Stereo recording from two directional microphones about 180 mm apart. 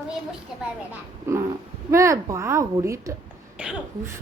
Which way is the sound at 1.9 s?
15° right (ahead or behind).